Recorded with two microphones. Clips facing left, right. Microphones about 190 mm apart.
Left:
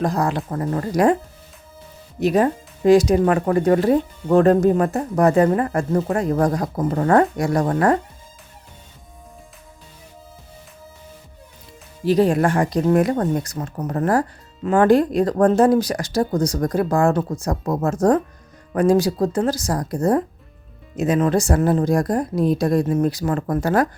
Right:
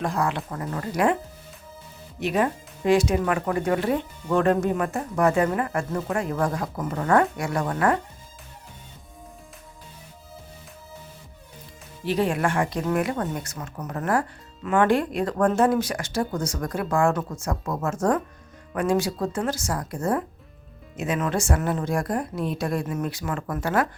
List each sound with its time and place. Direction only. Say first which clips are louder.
0.0 s speech: left 5 dB; 40° left (ahead or behind)
2.2 s speech: left 6 dB; 40° left (ahead or behind)
12.0 s speech: left 7 dB; 40° left (ahead or behind)